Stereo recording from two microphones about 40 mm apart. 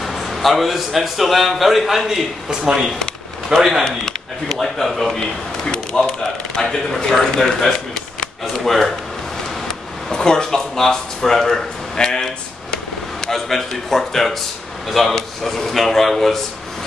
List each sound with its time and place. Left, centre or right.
0.0 s a man's voice: centre
3.5 s a man's voice: centre
5.7 s a man's voice: centre
10.1 s a man's voice: centre